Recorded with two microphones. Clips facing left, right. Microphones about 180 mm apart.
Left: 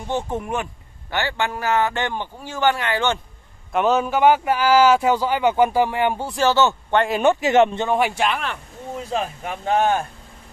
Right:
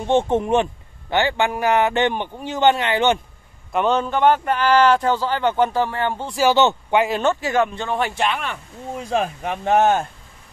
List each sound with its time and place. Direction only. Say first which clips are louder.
0.0 s a man's voice: right 7 dB; 25° right (ahead or behind)
3.7 s speech: left 1 dB; 5° left (ahead or behind)
6.4 s a man's voice: right 2 dB; 15° right (ahead or behind)
7.2 s speech: left 4 dB; 15° left (ahead or behind)
8.2 s speech: even; centre (ahead or behind)
9.4 s a man's voice: right 3 dB; 20° right (ahead or behind)